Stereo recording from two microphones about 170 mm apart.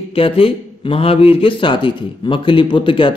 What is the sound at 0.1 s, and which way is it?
Speech, 35° left (ahead or behind).